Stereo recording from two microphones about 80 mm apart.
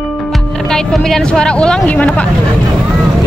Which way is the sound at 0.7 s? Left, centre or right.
Centre.